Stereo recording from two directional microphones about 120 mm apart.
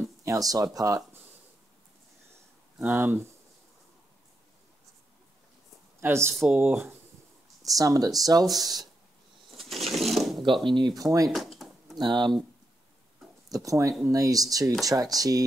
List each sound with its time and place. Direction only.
0.2 s speech: 30° right (ahead or behind)
2.8 s speech: 15° right (ahead or behind)
5.9 s speech: 20° right (ahead or behind)
7.7 s speech: 30° right (ahead or behind)
9.5 s a sound: centre (ahead or behind)
10.6 s speech: 40° right (ahead or behind)
11.0 s speech: 30° right (ahead or behind)
11.3 s drawer open or close: centre (ahead or behind)
12.0 s speech: 40° right (ahead or behind)
13.5 s speech: 30° right (ahead or behind)